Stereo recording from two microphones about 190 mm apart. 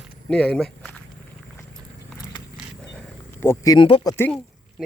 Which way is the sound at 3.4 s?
10° left (ahead or behind).